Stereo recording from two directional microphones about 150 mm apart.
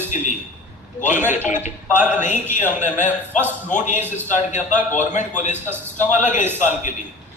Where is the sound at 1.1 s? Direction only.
15° right (ahead or behind).